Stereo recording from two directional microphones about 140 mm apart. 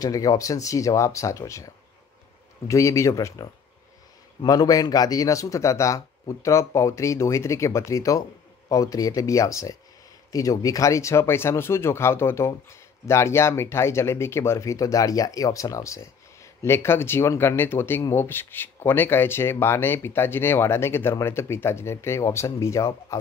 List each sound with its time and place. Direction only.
0.0 s speech: 25° left (ahead or behind)
2.7 s speech: 20° left (ahead or behind)